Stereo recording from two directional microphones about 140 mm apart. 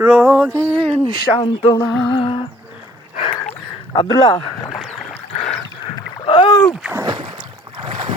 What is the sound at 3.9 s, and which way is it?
Speech, 30° left (ahead or behind).